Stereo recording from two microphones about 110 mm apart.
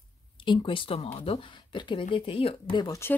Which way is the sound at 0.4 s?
50° left (ahead or behind).